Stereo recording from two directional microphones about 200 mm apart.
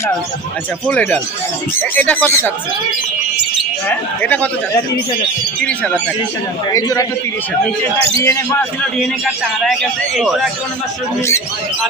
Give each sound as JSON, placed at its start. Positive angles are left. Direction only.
{"t": 0.9, "sound": "speech", "side_deg": 5}
{"t": 3.8, "sound": "speech", "side_deg": 10}
{"t": 6.7, "sound": "speech", "side_deg": 15}
{"t": 8.8, "sound": "a man's voice", "side_deg": 0}